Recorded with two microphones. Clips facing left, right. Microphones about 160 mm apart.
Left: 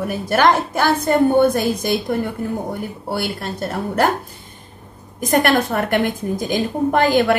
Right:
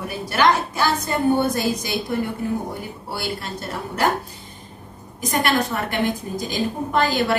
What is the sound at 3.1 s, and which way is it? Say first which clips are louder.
A woman's voice: left 4 dB; 55° left (ahead or behind).